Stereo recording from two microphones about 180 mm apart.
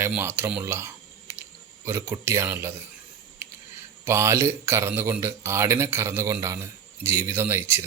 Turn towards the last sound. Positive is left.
turn(degrees=-15)  # may be behind; listen again after turning